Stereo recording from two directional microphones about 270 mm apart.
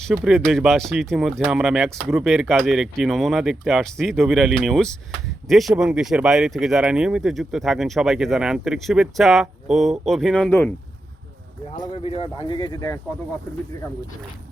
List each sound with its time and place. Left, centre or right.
0.0 s speech: centre
11.8 s speech: left